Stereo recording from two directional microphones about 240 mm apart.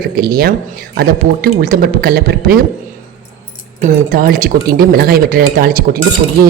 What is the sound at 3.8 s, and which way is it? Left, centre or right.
Speech, right.